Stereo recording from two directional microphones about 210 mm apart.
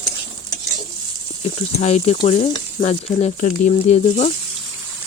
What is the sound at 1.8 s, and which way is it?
Speech, 30° left (ahead or behind).